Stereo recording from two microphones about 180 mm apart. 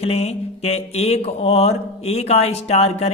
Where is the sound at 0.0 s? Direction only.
35° left (ahead or behind).